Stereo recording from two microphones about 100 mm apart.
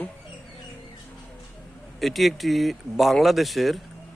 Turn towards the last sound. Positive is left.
turn(degrees=0)  # may be behind; listen again after turning